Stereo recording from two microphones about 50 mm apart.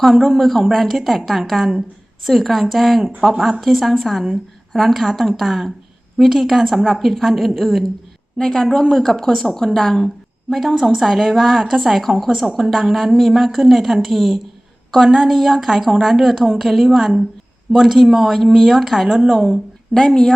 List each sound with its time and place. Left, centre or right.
0.0 s a woman's voice: centre
6.8 s a woman's voice: centre
8.4 s a woman's voice: centre
19.0 s a woman's voice: centre
19.9 s a woman's voice: centre